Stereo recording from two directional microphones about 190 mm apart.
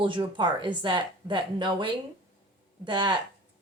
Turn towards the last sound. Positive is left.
turn(degrees=-25)  # may be behind; listen again after turning